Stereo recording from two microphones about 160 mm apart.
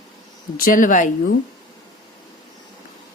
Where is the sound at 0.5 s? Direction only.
55° left (ahead or behind).